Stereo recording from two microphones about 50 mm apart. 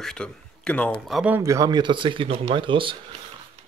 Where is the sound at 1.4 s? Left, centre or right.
Right.